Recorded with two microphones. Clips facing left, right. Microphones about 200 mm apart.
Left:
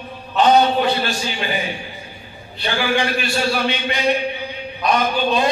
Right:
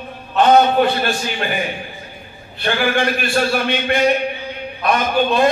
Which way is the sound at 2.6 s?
55° right (ahead or behind).